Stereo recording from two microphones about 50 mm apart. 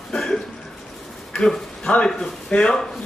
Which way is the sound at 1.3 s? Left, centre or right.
Centre.